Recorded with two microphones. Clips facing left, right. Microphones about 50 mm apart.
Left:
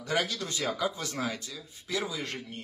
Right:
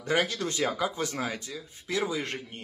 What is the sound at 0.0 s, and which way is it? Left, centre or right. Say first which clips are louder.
Speech: right 3 dB; right.